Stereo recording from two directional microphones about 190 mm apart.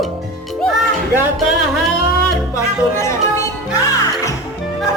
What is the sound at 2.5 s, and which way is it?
Music, 15° left (ahead or behind).